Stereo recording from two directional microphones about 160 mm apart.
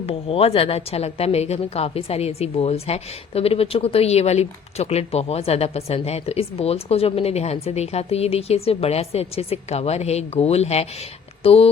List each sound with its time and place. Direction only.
0.0 s speech: 35° left (ahead or behind)